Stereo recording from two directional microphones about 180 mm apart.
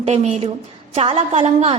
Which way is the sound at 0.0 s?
35° right (ahead or behind).